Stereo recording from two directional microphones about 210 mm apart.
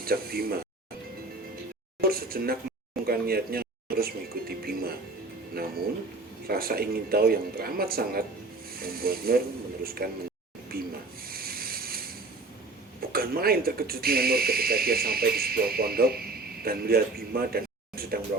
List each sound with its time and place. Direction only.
0.0 s speech: 45° right (ahead or behind)
2.0 s speech: 45° right (ahead or behind)
11.3 s a sound: 45° right (ahead or behind)
13.1 s speech: 45° right (ahead or behind)